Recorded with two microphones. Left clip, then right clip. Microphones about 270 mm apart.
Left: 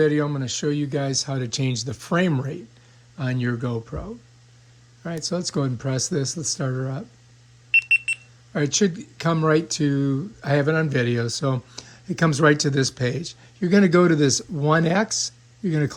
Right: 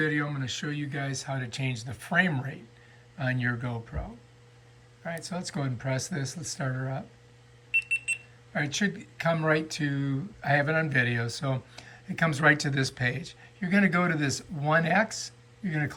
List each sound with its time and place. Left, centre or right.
0.0 s speech: centre
5.0 s speech: centre
8.5 s speech: centre